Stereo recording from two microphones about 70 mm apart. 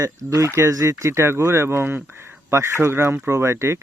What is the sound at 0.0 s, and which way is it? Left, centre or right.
Speech, right.